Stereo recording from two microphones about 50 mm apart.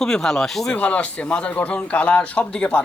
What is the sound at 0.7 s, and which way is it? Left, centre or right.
A man's voice, left.